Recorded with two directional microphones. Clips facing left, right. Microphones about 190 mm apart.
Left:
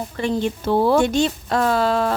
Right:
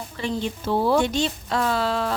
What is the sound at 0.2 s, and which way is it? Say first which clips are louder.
A woman's voice: left 5 dB; 55° left (ahead or behind).